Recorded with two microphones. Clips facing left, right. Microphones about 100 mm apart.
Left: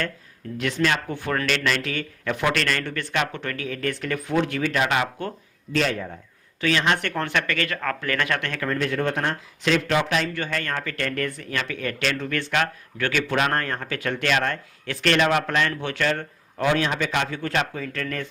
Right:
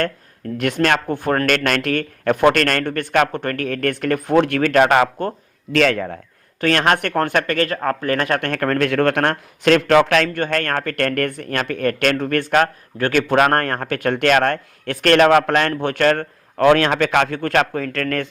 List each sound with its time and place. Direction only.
0.5 s speech: 55° right (ahead or behind)
5.7 s a man's voice: 70° right (ahead or behind)
6.6 s speech: 55° right (ahead or behind)